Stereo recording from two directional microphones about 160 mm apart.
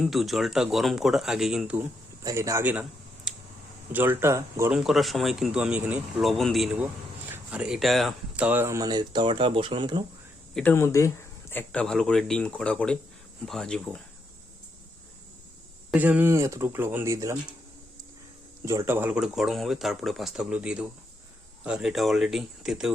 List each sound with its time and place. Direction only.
0.0 s speech: centre (ahead or behind)
2.2 s speech: 20° right (ahead or behind)
3.3 s a sound: 5° right (ahead or behind)
3.9 s speech: 15° right (ahead or behind)
4.7 s speech: centre (ahead or behind); by 10.0 s 30° right (ahead or behind)
10.5 s speech: 10° left (ahead or behind)
11.5 s speech: 5° left (ahead or behind)
15.9 s speech: 10° right (ahead or behind)
18.6 s speech: 20° right (ahead or behind); by 22.9 s centre (ahead or behind)